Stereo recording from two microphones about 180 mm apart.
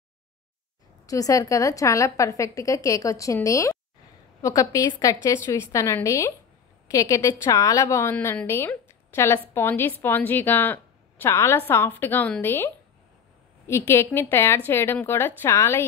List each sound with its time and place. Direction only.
1.0 s a woman's voice: 20° left (ahead or behind)